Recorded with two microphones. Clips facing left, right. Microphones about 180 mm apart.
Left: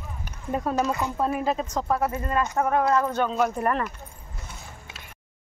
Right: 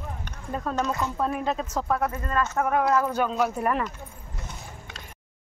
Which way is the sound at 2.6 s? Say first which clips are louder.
Even; centre (ahead or behind).